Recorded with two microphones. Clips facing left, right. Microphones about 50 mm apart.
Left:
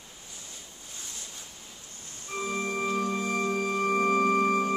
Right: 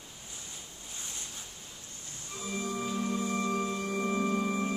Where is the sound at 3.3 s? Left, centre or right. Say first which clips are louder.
Left 3 dB; left.